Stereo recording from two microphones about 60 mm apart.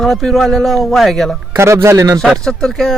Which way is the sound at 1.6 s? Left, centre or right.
Right.